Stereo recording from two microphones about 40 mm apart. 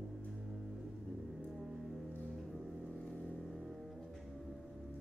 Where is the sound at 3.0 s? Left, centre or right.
Left.